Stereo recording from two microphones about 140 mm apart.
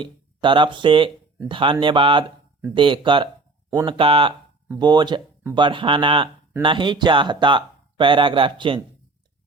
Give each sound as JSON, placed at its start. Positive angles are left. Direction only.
{"t": 0.0, "sound": "speech", "side_deg": -35}